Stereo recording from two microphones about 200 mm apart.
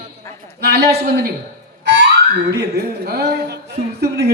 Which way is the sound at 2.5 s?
55° right (ahead or behind).